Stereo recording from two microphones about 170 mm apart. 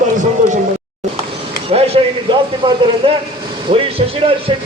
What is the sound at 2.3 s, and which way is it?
A man's voice, 30° right (ahead or behind).